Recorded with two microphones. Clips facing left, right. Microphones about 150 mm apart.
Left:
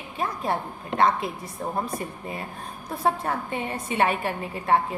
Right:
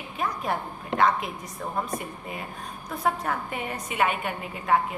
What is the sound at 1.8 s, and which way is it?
A woman's voice, 30° left (ahead or behind).